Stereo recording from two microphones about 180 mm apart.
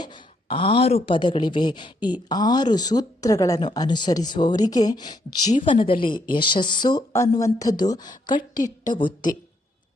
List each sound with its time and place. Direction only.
0.0 s speech: 25° left (ahead or behind)